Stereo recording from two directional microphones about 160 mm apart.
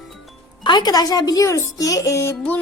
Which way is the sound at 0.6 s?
25° left (ahead or behind).